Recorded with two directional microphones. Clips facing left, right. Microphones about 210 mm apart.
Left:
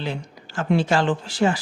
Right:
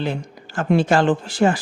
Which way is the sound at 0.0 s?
50° right (ahead or behind).